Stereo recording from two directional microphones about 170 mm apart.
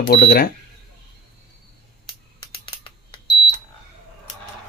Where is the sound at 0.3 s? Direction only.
60° left (ahead or behind).